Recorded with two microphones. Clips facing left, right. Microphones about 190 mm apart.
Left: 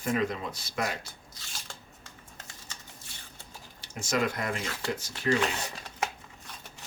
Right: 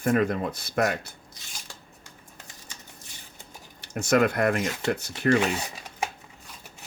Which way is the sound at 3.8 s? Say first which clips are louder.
Right 7 dB; 60° right (ahead or behind).